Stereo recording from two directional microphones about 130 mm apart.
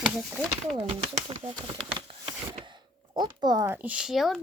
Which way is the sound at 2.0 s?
40° right (ahead or behind).